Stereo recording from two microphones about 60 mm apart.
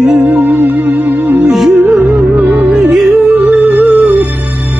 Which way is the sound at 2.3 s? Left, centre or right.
Right.